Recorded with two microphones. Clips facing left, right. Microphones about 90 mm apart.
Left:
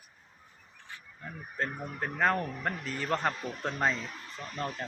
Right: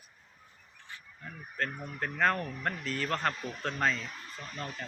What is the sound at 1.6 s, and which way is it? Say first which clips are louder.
Speech: left 1 dB; 20° left (ahead or behind).